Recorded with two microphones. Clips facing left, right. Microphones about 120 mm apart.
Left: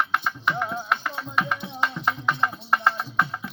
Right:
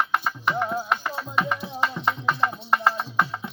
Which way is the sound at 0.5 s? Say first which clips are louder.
Right 2 dB; 10° right (ahead or behind).